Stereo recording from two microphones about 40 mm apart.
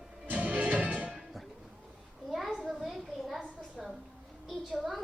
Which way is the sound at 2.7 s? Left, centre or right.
Centre.